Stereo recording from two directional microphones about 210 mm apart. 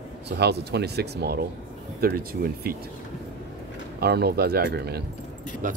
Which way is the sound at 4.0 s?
50° right (ahead or behind).